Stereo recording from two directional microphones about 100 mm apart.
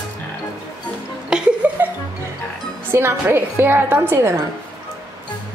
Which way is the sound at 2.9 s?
25° right (ahead or behind).